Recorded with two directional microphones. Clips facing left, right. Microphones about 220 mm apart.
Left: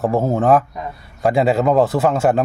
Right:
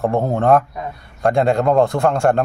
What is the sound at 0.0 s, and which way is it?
Speech, 5° left (ahead or behind).